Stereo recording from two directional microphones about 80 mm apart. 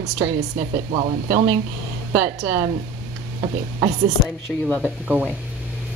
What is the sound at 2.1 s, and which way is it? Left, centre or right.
Speech, right.